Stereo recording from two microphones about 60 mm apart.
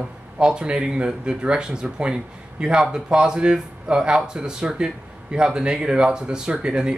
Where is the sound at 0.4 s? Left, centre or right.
Centre.